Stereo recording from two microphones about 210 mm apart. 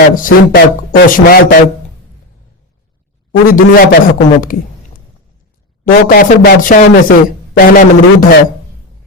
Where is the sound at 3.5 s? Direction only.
40° left (ahead or behind).